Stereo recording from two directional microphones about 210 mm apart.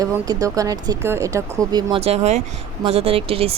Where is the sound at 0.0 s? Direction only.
15° right (ahead or behind).